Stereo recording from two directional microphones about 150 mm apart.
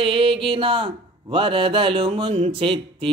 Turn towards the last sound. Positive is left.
turn(degrees=-35)  # may be behind; listen again after turning